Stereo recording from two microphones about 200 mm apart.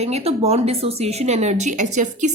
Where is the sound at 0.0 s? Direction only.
30° right (ahead or behind).